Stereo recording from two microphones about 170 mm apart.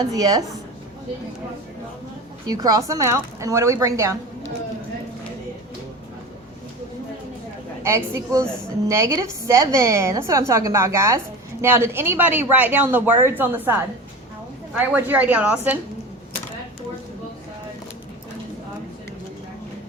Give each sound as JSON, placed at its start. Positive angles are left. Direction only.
{"t": 0.0, "sound": "a woman's voice", "side_deg": -20}
{"t": 2.5, "sound": "a woman's voice", "side_deg": -20}
{"t": 7.9, "sound": "speech", "side_deg": -15}
{"t": 14.8, "sound": "speech", "side_deg": -10}